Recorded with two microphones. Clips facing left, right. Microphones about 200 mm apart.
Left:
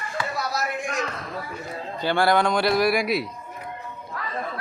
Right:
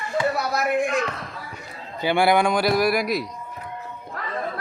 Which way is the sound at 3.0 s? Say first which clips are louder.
Even; 45° right (ahead or behind).